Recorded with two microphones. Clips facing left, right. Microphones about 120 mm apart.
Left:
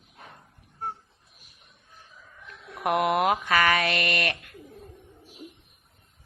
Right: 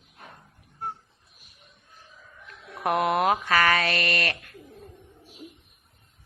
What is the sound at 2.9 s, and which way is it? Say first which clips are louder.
Speech: even; 15° left (ahead or behind).